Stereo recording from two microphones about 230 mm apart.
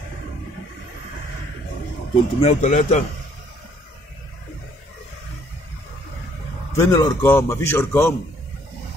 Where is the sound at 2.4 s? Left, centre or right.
Left.